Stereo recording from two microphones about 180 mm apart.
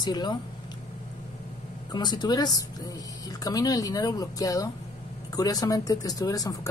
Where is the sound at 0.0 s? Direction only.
25° left (ahead or behind).